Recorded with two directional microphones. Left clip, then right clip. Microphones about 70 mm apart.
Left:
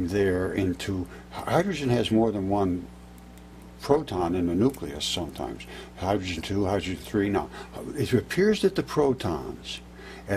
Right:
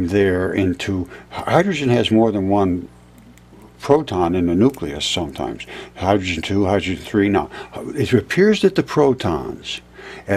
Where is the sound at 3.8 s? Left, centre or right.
Centre.